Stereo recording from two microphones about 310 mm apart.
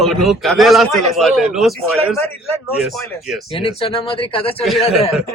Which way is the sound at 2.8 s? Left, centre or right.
Centre.